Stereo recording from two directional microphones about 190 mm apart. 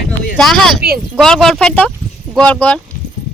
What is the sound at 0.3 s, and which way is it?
Speech, centre (ahead or behind).